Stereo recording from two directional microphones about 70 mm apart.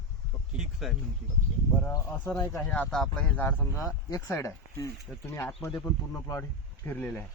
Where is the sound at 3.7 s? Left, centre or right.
Left.